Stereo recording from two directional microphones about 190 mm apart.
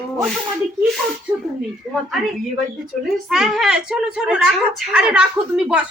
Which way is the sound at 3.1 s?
Centre (ahead or behind).